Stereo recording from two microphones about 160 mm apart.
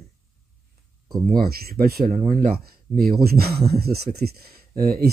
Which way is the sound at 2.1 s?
55° right (ahead or behind).